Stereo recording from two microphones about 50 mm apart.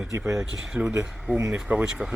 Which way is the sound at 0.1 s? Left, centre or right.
Right.